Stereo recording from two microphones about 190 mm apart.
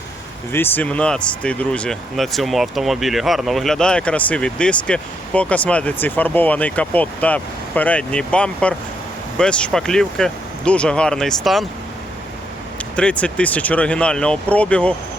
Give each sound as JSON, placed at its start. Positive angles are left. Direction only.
{"t": 0.5, "sound": "speech", "side_deg": 10}
{"t": 13.0, "sound": "speech", "side_deg": 5}